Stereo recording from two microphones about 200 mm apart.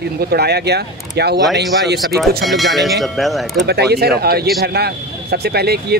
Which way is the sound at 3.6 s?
55° right (ahead or behind).